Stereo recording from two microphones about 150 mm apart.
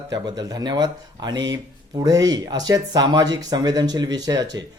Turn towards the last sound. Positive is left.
turn(degrees=-25)  # may be behind; listen again after turning